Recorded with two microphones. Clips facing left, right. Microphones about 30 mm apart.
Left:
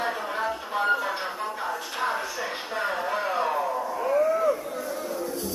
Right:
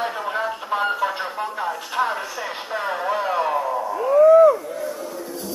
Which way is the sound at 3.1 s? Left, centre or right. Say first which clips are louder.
Right 8 dB; centre.